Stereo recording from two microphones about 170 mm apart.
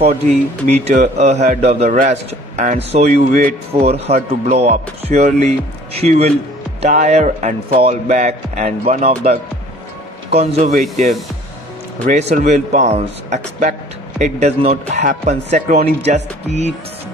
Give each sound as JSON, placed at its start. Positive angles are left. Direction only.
{"t": 0.0, "sound": "speech", "side_deg": -40}
{"t": 10.3, "sound": "speech", "side_deg": -40}
{"t": 12.1, "sound": "speech", "side_deg": -45}